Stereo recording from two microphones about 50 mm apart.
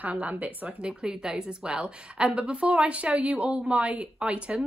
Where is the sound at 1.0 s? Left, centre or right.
Centre.